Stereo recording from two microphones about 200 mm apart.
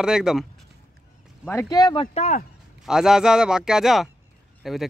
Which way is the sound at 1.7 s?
25° left (ahead or behind).